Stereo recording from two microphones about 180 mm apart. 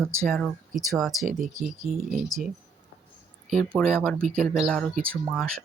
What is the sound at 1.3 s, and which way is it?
Speech, 45° right (ahead or behind).